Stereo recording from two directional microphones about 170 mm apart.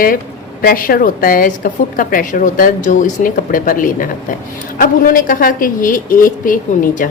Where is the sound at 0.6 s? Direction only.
55° left (ahead or behind).